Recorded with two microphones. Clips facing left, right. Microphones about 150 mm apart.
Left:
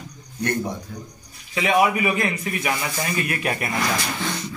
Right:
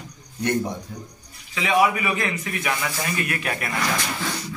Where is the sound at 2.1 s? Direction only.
30° left (ahead or behind).